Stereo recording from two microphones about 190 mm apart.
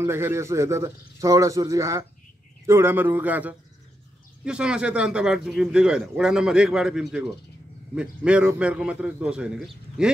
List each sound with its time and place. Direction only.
0.0 s a man's voice: 15° right (ahead or behind)